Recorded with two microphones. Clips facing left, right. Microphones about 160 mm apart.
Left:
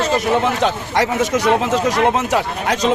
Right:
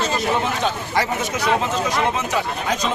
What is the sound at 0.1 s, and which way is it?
Speech, 70° left (ahead or behind).